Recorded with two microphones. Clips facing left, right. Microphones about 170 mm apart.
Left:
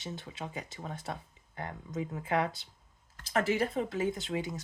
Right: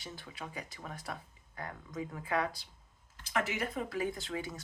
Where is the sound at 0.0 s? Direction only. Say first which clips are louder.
Left 5 dB; 25° left (ahead or behind).